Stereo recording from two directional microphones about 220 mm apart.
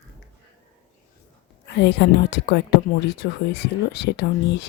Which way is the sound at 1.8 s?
50° left (ahead or behind).